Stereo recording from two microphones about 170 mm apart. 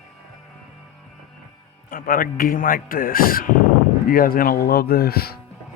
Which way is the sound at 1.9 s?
55° left (ahead or behind).